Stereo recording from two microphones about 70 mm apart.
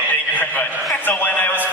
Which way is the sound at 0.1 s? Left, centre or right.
Left.